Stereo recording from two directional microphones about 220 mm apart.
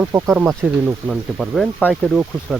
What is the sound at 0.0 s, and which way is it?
Speech, 10° right (ahead or behind).